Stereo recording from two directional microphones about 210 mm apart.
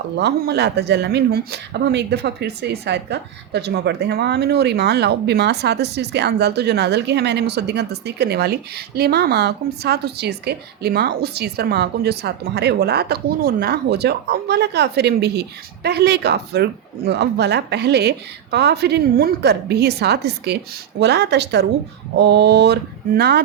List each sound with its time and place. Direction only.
0.2 s speech: 50° right (ahead or behind)